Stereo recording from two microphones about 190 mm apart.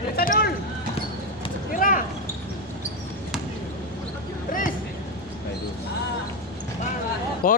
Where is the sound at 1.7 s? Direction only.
45° left (ahead or behind).